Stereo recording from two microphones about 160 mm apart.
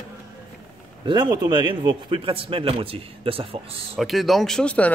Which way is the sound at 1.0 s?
30° right (ahead or behind).